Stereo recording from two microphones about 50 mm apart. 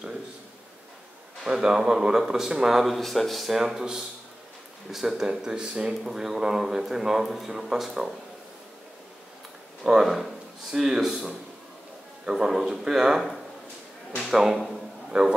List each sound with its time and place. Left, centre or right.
1.4 s a man's voice: centre
2.8 s speech: centre
3.5 s speech: centre
10.0 s speech: centre
14.3 s speech: centre
15.0 s a man's voice: centre